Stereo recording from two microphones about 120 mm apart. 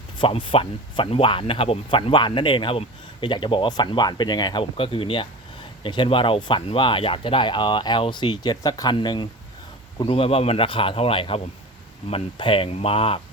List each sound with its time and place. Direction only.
0.2 s speech: 45° left (ahead or behind)
2.0 s speech: 40° left (ahead or behind)
10.0 s speech: 50° left (ahead or behind)